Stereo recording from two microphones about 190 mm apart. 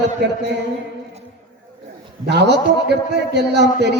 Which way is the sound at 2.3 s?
60° right (ahead or behind).